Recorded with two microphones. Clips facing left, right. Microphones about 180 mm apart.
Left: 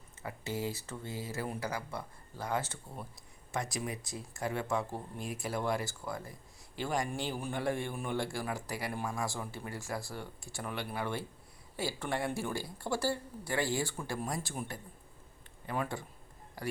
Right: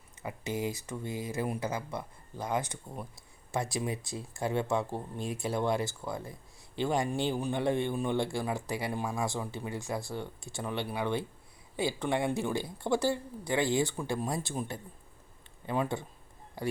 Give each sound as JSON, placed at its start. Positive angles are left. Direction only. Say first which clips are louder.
{"t": 0.2, "sound": "speech", "louder": "right 3 dB", "side_deg": -15}
{"t": 3.5, "sound": "speech", "louder": "right 4 dB", "side_deg": -30}